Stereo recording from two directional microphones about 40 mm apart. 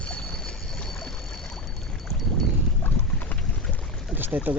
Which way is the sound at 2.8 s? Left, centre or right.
Left.